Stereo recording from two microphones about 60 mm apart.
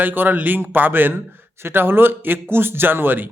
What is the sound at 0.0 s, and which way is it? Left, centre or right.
Speech, right.